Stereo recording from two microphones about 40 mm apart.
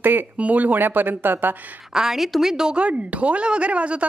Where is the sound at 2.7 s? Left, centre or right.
Right.